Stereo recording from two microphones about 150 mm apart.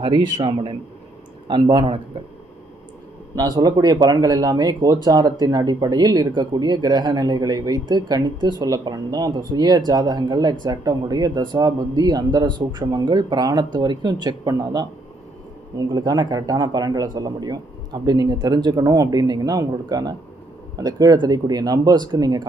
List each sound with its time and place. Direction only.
0.0 s a man's voice: 35° right (ahead or behind)
3.3 s speech: 25° right (ahead or behind)
15.9 s speech: 25° right (ahead or behind)